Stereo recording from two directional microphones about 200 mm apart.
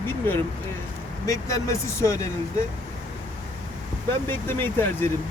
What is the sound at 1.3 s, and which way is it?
Speech, 15° left (ahead or behind).